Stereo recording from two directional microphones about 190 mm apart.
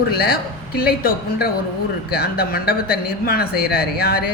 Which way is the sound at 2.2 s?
55° left (ahead or behind).